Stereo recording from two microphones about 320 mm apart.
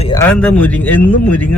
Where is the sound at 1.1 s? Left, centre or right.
Left.